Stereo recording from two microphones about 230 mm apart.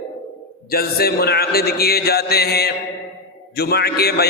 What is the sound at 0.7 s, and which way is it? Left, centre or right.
A man's voice, left.